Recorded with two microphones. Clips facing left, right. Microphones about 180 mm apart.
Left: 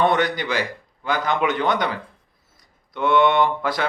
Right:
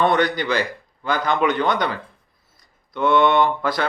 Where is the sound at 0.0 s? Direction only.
15° left (ahead or behind).